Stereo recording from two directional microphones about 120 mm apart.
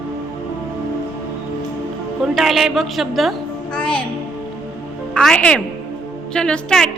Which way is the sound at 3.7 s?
45° left (ahead or behind).